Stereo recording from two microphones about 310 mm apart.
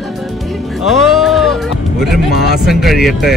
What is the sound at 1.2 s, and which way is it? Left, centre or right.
Music, centre.